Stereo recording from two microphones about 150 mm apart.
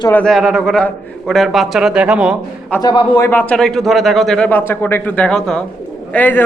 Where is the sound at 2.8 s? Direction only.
30° left (ahead or behind); by 6.4 s 10° left (ahead or behind).